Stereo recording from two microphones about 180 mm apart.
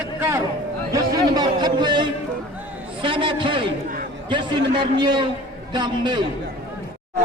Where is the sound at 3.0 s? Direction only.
25° right (ahead or behind).